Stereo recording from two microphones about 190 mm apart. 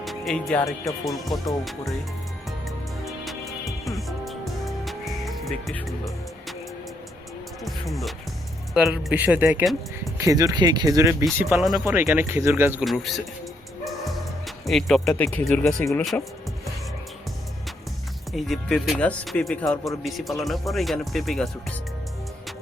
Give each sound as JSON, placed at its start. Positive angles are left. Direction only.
{"t": 0.0, "sound": "music", "side_deg": 0}
{"t": 0.9, "sound": "speech", "side_deg": 0}
{"t": 3.0, "sound": "music", "side_deg": 0}
{"t": 7.6, "sound": "speech", "side_deg": 0}
{"t": 12.8, "sound": "speech", "side_deg": 0}
{"t": 14.4, "sound": "speech", "side_deg": 0}
{"t": 18.3, "sound": "speech", "side_deg": 0}